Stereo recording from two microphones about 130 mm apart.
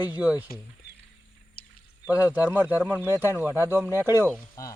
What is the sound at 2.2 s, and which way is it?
Speech, 15° right (ahead or behind).